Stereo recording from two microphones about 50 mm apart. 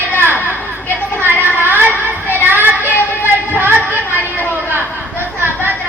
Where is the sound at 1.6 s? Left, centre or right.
Right.